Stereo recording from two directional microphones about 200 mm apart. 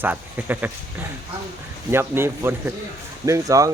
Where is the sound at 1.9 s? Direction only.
10° right (ahead or behind).